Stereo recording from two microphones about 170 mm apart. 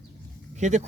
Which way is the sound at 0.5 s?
45° right (ahead or behind).